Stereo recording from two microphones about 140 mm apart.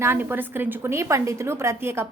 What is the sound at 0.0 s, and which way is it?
A woman's voice, 15° right (ahead or behind).